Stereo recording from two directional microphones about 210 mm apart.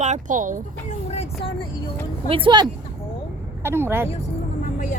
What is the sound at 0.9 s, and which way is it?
Vehicle, 30° left (ahead or behind).